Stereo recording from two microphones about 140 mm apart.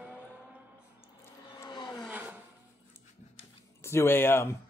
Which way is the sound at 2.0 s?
10° right (ahead or behind).